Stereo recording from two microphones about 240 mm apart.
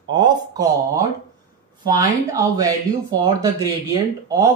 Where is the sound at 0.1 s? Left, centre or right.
Centre.